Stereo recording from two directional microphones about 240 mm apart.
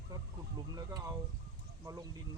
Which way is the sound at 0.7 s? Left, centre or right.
Centre.